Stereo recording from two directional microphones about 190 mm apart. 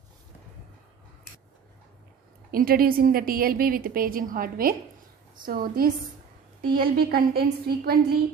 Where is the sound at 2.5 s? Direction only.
50° right (ahead or behind).